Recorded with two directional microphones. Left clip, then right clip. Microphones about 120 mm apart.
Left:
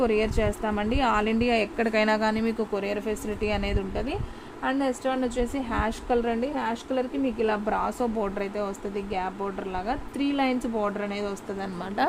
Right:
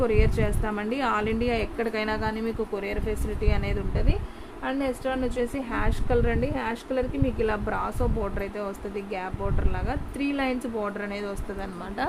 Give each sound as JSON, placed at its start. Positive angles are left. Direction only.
{"t": 0.0, "sound": "speech", "side_deg": 40}
{"t": 1.7, "sound": "speech", "side_deg": 85}
{"t": 2.8, "sound": "speech", "side_deg": 55}
{"t": 4.6, "sound": "speech", "side_deg": 30}
{"t": 6.4, "sound": "a woman's voice", "side_deg": 10}
{"t": 7.3, "sound": "speech", "side_deg": 30}